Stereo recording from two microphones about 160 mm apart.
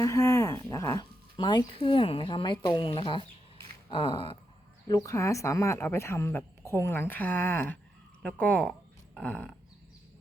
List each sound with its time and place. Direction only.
0.0 s speech: 20° left (ahead or behind)
3.8 s a sound: 30° left (ahead or behind)
4.9 s speech: 20° left (ahead or behind)